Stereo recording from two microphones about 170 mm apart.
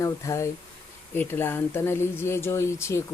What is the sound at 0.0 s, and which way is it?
Speech, 15° left (ahead or behind).